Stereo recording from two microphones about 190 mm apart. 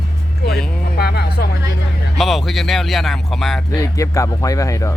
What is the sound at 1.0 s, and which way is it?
Speech, 60° left (ahead or behind).